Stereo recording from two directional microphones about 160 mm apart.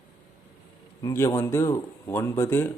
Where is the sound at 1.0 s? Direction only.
20° left (ahead or behind).